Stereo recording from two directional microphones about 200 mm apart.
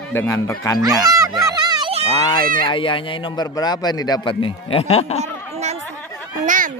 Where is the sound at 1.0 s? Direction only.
15° right (ahead or behind).